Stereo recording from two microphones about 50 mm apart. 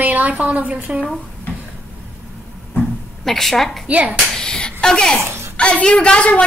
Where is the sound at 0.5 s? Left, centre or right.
Right.